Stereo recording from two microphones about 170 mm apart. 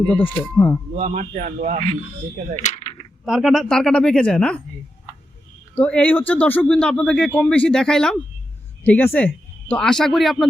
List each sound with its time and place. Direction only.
0.5 s speech: 10° left (ahead or behind)
0.9 s a man's voice: 45° right (ahead or behind)
2.6 s coin: 40° left (ahead or behind)
3.2 s speech: centre (ahead or behind)
5.7 s speech: 10° left (ahead or behind)